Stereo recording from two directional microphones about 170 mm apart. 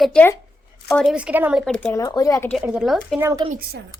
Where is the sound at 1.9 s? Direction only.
20° left (ahead or behind).